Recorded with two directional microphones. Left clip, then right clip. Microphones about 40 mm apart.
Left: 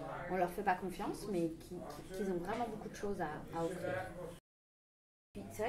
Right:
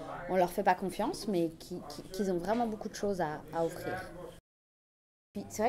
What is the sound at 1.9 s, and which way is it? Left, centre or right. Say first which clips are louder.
Speech: right 6 dB; right.